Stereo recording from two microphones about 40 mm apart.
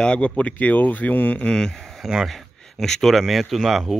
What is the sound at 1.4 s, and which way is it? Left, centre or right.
Speech, centre.